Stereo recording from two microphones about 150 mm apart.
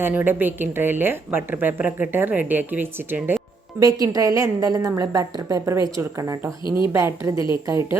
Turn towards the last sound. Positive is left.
turn(degrees=-20)  # may be behind; listen again after turning